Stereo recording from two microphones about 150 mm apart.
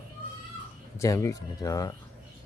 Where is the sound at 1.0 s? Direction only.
20° left (ahead or behind).